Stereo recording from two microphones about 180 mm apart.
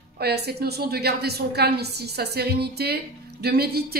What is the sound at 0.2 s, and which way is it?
A woman's voice, 65° right (ahead or behind).